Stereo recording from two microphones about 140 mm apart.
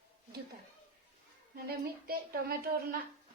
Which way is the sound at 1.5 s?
90° right.